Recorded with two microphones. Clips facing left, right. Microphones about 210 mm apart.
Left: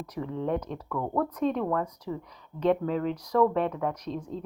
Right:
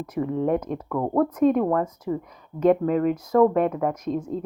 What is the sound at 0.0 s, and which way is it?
Speech, 55° right (ahead or behind).